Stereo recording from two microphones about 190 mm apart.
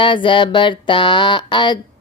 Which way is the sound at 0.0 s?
25° left (ahead or behind).